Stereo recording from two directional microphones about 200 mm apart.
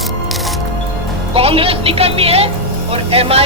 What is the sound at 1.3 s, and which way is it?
Speech, 30° right (ahead or behind).